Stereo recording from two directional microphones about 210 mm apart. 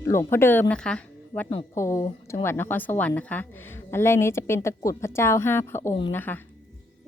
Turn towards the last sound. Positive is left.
turn(degrees=10)  # may be behind; listen again after turning